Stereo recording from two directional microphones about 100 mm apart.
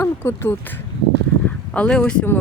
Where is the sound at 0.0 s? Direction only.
25° left (ahead or behind).